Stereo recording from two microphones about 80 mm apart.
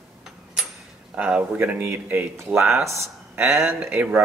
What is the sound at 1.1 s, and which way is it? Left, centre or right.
Speech, centre.